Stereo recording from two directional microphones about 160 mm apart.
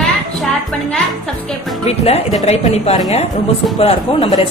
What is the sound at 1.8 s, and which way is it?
Speech, 40° left (ahead or behind).